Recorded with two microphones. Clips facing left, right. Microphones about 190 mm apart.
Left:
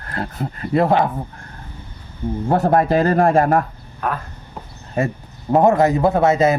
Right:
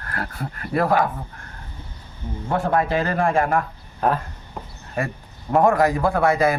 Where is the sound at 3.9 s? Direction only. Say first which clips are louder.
Right 3 dB; 30° right (ahead or behind).